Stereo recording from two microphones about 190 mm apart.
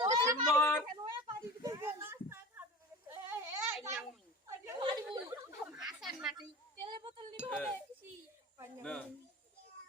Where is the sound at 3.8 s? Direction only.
15° right (ahead or behind).